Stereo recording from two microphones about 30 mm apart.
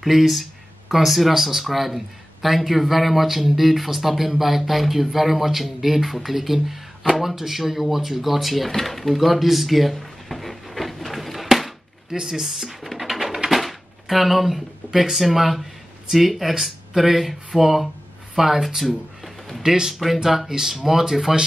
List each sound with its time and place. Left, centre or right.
0.0 s speech: centre
11.5 s a sound: centre
12.2 s speech: centre
13.1 s bird: centre
13.5 s speech: centre
20.7 s speech: centre